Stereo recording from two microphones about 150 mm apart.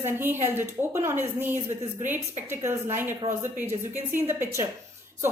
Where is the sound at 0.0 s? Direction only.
15° right (ahead or behind).